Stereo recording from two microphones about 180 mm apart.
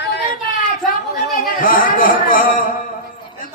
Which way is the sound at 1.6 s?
50° left (ahead or behind).